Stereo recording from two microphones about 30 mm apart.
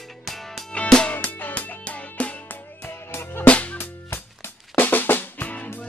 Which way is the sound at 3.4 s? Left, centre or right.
Left.